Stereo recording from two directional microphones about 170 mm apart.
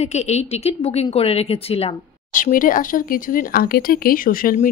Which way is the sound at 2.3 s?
50° left (ahead or behind).